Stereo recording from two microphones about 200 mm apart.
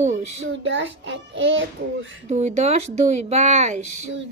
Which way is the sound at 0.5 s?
65° right (ahead or behind).